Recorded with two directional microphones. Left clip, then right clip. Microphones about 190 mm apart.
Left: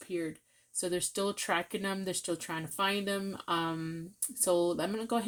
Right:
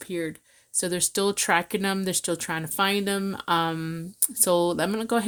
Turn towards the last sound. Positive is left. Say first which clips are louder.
# right 8 dB
turn(degrees=-55)  # may be behind; listen again after turning